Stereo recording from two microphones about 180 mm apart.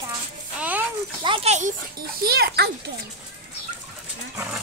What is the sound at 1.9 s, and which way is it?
Speech, 60° right (ahead or behind).